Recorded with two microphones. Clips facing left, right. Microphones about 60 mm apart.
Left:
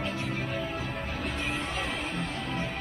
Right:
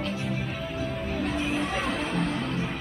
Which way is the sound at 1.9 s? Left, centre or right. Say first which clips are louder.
Right 5 dB; right.